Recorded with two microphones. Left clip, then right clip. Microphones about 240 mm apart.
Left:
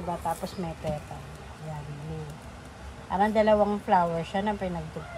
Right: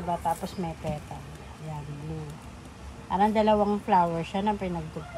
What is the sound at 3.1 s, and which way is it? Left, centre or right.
Speech, left.